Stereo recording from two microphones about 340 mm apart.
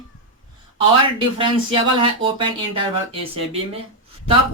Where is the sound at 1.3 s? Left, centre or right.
Centre.